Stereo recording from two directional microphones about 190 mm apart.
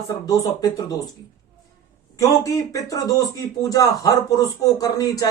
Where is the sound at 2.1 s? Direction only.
15° left (ahead or behind).